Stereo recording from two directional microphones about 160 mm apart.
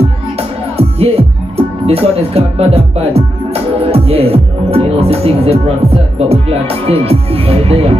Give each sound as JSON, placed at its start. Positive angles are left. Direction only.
{"t": 0.7, "sound": "music", "side_deg": -40}